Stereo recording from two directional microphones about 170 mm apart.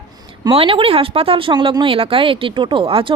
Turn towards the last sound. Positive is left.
turn(degrees=-30)  # may be behind; listen again after turning